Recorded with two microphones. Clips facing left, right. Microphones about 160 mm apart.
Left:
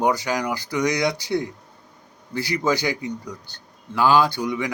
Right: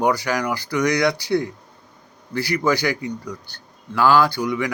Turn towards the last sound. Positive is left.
turn(degrees=20)  # may be behind; listen again after turning